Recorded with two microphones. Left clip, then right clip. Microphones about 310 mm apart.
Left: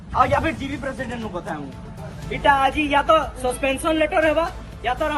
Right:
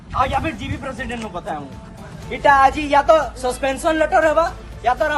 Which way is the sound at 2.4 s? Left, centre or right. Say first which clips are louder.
Right 4 dB; centre.